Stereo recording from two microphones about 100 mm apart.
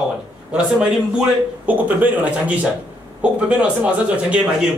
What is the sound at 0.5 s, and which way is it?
Speech, 10° right (ahead or behind).